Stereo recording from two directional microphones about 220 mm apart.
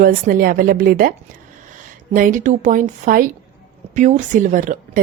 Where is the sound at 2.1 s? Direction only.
35° right (ahead or behind).